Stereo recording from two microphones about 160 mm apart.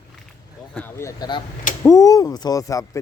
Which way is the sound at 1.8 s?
20° left (ahead or behind).